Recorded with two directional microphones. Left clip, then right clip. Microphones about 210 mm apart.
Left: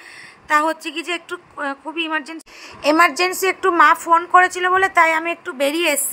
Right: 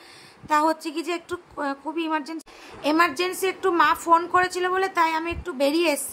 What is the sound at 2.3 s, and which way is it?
A woman's voice, 25° left (ahead or behind).